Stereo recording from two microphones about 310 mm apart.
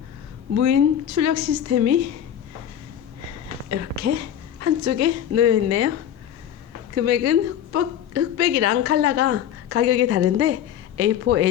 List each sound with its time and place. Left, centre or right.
0.5 s a woman's voice: right
3.7 s a woman's voice: right
6.9 s a woman's voice: right